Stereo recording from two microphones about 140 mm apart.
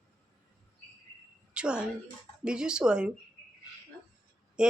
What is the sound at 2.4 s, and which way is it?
Speech, 5° right (ahead or behind).